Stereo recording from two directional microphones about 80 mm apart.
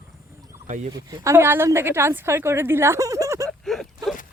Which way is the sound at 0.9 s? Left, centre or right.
Right.